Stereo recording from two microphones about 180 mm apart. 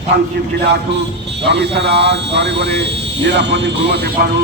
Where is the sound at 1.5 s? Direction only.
70° right (ahead or behind).